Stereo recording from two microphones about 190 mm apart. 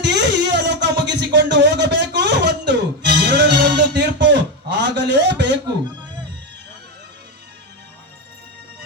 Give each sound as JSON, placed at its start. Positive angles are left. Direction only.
{"t": 0.0, "sound": "music", "side_deg": -65}